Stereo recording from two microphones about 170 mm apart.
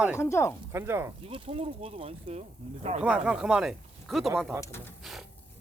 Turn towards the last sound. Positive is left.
turn(degrees=0)  # may be behind; listen again after turning